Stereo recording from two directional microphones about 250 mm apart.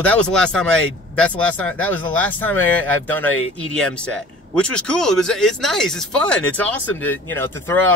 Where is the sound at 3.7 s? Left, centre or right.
Centre.